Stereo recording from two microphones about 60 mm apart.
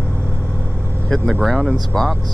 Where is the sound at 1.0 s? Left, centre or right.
Centre.